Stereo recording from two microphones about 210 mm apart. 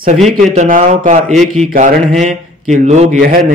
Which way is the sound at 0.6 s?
35° right (ahead or behind).